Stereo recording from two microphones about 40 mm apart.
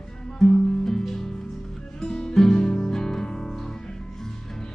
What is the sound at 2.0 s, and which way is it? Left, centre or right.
Music, left.